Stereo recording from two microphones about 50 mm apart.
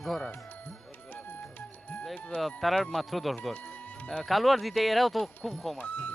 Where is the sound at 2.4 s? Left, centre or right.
Centre.